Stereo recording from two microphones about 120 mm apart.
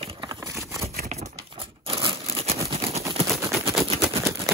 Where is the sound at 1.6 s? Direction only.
50° right (ahead or behind).